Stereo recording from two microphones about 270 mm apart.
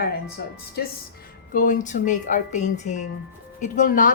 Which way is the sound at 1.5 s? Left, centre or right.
Left.